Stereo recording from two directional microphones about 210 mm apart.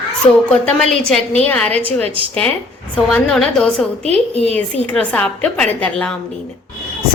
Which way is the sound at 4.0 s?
30° right (ahead or behind).